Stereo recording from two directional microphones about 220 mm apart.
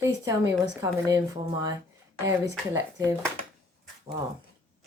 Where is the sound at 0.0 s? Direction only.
15° right (ahead or behind).